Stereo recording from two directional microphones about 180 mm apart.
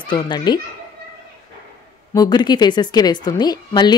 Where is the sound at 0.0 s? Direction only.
25° left (ahead or behind).